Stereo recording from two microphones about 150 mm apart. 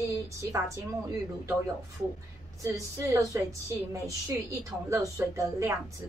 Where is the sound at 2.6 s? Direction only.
20° right (ahead or behind).